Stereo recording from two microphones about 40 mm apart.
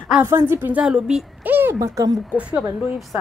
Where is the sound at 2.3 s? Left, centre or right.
Right.